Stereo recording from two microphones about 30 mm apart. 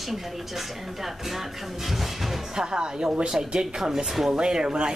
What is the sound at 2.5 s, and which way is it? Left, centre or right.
Speech, right.